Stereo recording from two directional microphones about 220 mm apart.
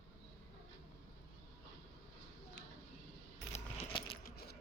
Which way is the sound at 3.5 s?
25° left (ahead or behind).